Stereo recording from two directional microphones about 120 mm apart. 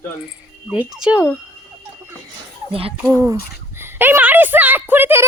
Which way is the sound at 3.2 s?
20° right (ahead or behind).